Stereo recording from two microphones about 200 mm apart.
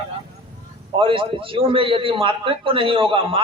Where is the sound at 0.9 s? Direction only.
25° right (ahead or behind).